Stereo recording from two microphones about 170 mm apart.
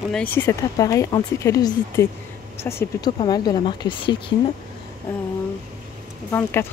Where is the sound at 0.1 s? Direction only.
10° left (ahead or behind); by 4.2 s 30° left (ahead or behind).